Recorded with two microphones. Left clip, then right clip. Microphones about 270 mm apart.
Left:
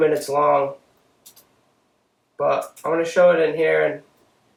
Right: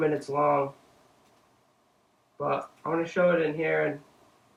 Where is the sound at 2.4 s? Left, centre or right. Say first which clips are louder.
Left 9 dB; centre.